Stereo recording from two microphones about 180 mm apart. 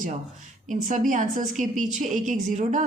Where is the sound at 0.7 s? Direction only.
45° right (ahead or behind).